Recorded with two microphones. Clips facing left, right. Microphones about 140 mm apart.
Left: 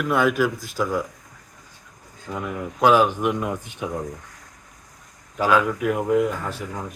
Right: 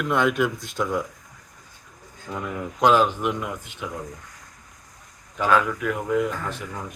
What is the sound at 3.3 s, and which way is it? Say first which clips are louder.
Speech: left 4 dB; 35° left (ahead or behind).